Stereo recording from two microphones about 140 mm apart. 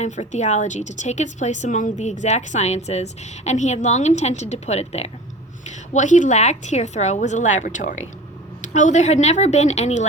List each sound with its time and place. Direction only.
0.0 s speech: 55° left (ahead or behind)
5.9 s speech: 60° left (ahead or behind)